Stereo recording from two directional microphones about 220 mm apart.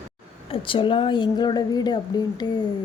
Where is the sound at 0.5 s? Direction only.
25° left (ahead or behind).